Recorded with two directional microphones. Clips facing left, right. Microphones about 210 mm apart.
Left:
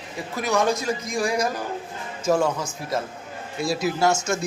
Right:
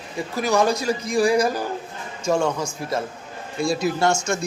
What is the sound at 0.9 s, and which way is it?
Speech, 35° right (ahead or behind).